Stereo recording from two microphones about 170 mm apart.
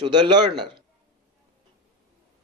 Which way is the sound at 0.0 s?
25° right (ahead or behind).